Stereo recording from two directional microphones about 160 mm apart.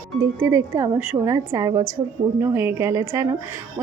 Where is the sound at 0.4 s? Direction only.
15° right (ahead or behind).